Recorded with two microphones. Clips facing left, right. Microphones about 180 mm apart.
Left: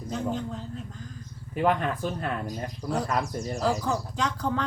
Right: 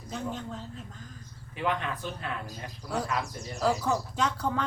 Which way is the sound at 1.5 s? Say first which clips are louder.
Left 6 dB; 45° left (ahead or behind).